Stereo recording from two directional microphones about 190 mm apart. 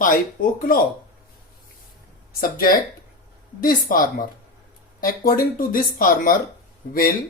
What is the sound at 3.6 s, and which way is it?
Speech, 50° left (ahead or behind).